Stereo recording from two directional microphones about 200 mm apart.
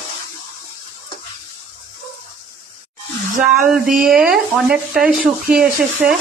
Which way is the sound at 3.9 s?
50° right (ahead or behind).